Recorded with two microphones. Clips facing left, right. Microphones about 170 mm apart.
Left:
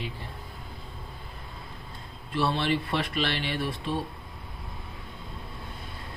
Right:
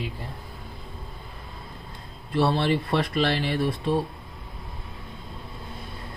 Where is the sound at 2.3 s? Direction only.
40° right (ahead or behind).